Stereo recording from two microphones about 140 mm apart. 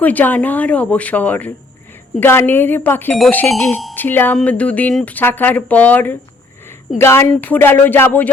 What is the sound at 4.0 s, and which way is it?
Speech, 15° left (ahead or behind).